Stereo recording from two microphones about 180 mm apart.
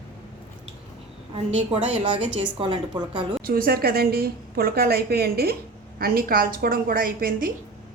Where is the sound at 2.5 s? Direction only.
25° right (ahead or behind).